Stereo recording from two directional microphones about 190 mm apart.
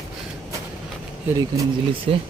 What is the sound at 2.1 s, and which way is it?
Speech, 30° right (ahead or behind).